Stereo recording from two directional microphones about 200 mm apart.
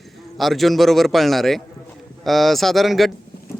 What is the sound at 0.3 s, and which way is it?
Speech, centre (ahead or behind).